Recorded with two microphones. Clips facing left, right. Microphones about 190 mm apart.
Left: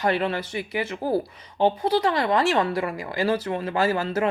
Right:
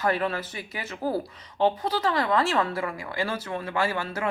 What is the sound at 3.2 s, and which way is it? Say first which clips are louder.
Speech: left 7 dB; 35° left (ahead or behind).